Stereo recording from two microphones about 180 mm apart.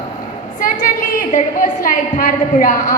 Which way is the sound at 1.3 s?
45° left (ahead or behind).